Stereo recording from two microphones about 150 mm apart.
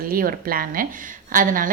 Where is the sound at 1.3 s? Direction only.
65° right (ahead or behind).